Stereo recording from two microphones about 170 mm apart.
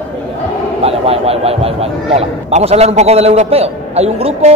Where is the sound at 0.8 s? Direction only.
35° right (ahead or behind).